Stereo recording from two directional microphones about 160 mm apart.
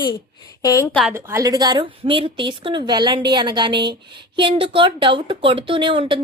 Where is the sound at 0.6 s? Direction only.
20° left (ahead or behind).